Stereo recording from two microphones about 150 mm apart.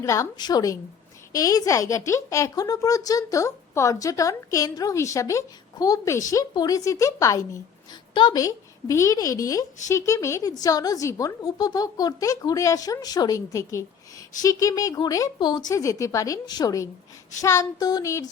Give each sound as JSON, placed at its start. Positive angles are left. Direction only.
{"t": 0.0, "sound": "a woman's voice", "side_deg": 20}